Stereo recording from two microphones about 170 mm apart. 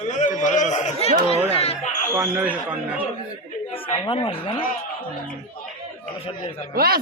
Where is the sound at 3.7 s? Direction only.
30° left (ahead or behind).